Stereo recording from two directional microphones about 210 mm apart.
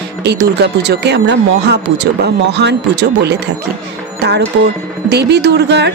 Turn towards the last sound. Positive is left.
turn(degrees=-55)  # may be behind; listen again after turning